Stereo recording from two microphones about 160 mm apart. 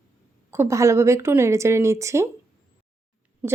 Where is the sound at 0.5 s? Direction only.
15° right (ahead or behind).